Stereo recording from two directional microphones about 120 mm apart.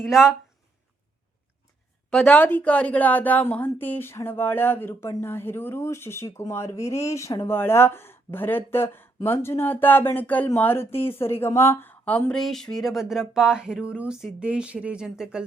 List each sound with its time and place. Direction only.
0.0 s speech: 5° right (ahead or behind)
2.0 s a woman's voice: 10° left (ahead or behind); by 15.4 s 5° right (ahead or behind)